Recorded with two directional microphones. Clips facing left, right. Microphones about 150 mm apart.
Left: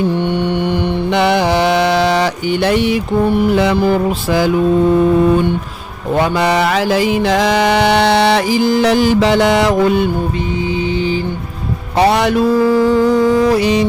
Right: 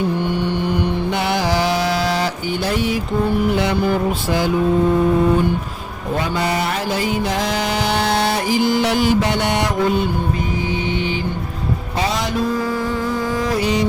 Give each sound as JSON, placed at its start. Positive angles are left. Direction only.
{"t": 1.1, "sound": "mantra", "side_deg": 70}
{"t": 4.3, "sound": "mantra", "side_deg": 90}
{"t": 6.1, "sound": "music", "side_deg": 75}
{"t": 9.0, "sound": "mantra", "side_deg": 90}
{"t": 11.9, "sound": "music", "side_deg": 65}
{"t": 13.5, "sound": "music", "side_deg": 85}